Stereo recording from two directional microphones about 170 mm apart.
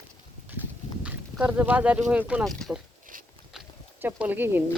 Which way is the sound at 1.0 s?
10° right (ahead or behind).